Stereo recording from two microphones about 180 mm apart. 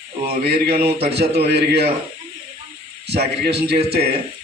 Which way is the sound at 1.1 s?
60° right (ahead or behind).